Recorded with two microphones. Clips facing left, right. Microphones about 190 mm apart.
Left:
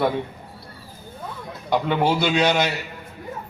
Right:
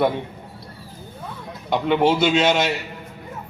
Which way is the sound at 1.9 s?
25° right (ahead or behind).